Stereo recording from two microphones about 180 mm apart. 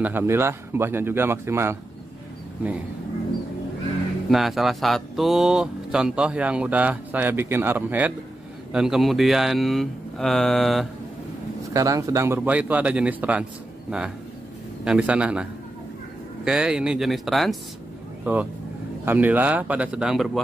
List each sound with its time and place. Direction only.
0.0 s speech: 10° right (ahead or behind)
4.3 s speech: centre (ahead or behind)
11.7 s speech: 20° right (ahead or behind)
16.4 s speech: 5° right (ahead or behind)